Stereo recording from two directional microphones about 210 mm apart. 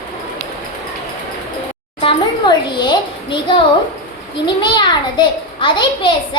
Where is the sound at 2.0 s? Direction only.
25° left (ahead or behind).